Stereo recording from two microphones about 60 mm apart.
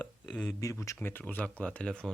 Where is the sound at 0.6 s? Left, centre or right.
Left.